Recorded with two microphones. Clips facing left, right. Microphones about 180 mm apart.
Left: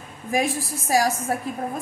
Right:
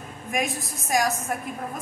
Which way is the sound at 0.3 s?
30° left (ahead or behind).